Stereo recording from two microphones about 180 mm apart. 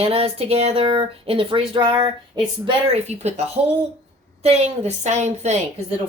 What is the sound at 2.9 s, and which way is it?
Speech, 35° right (ahead or behind).